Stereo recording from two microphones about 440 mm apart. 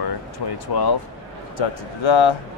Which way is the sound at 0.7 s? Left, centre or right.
Left.